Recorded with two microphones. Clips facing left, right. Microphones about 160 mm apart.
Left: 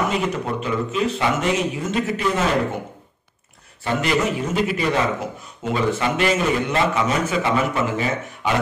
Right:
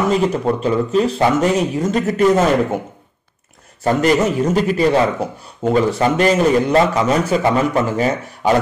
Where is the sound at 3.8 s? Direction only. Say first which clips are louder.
Right 6 dB; 40° right (ahead or behind).